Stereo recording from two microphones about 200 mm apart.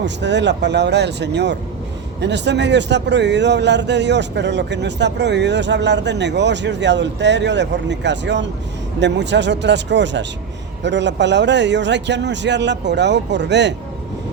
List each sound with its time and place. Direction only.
0.0 s speech: 60° right (ahead or behind)